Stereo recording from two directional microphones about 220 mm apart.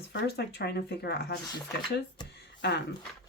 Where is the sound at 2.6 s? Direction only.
50° left (ahead or behind).